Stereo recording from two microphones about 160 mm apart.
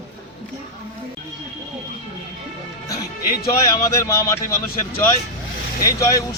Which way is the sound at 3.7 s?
20° left (ahead or behind).